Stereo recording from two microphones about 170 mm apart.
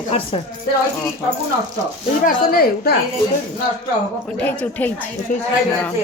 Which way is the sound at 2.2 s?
55° left (ahead or behind).